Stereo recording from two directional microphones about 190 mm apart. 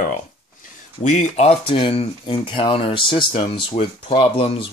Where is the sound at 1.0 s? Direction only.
40° left (ahead or behind).